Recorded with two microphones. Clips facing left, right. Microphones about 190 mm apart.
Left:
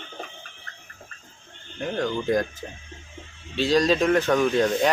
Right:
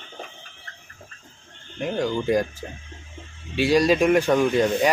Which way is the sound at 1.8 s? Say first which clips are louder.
Right 2 dB; 10° right (ahead or behind).